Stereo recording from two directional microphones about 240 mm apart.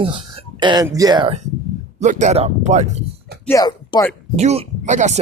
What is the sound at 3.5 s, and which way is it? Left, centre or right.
Speech, centre.